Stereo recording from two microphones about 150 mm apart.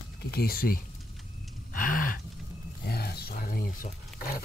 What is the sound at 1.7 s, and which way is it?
Gasp, 65° left (ahead or behind).